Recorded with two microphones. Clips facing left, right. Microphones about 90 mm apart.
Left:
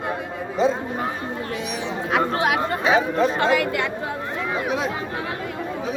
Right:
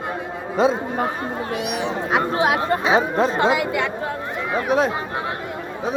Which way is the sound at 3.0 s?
40° right (ahead or behind).